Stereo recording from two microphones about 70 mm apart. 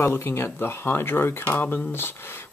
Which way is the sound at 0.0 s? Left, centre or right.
Left.